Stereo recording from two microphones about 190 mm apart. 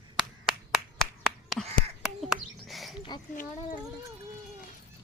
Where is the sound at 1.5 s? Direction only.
Centre (ahead or behind).